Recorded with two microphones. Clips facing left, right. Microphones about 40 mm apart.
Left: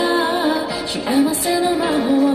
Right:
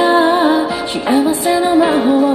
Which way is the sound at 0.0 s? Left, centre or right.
Right.